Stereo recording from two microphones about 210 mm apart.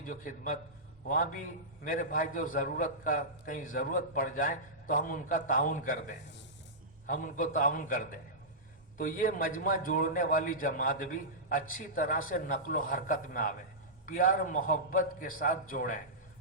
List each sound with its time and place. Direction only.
0.0 s a man's voice: 40° left (ahead or behind)